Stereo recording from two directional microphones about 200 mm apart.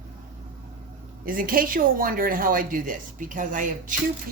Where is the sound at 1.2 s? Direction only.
45° right (ahead or behind).